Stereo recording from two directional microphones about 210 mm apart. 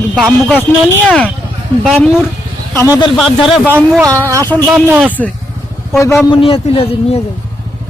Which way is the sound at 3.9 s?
10° right (ahead or behind).